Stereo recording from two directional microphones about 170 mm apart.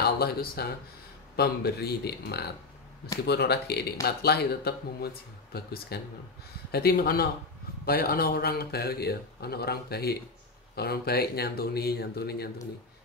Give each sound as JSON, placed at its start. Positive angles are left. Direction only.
{"t": 0.0, "sound": "speech", "side_deg": 65}